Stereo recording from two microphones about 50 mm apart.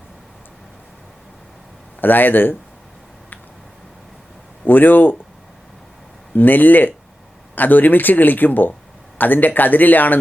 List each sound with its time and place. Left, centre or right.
2.0 s a man's voice: left
4.6 s a man's voice: left
6.3 s a man's voice: left